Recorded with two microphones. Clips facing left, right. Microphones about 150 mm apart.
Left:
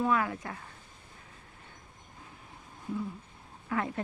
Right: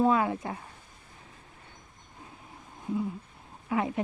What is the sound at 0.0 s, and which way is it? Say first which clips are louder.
Speech: right 4 dB; 25° right (ahead or behind).